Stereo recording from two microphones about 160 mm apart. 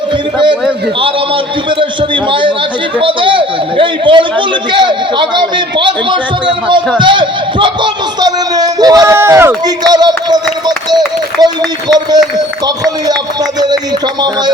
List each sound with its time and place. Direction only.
1.8 s a man's voice: 30° right (ahead or behind)